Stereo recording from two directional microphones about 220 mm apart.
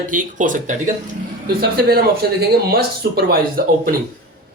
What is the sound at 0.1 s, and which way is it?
Speech, 35° right (ahead or behind).